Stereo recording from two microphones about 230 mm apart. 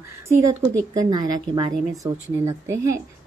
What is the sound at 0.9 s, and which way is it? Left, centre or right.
A woman's voice, centre.